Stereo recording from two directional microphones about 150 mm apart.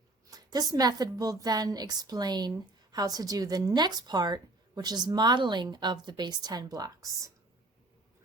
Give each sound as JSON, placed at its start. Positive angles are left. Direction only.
{"t": 0.3, "sound": "a woman's voice", "side_deg": -25}